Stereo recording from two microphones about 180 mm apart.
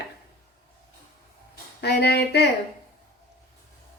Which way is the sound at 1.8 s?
65° left (ahead or behind).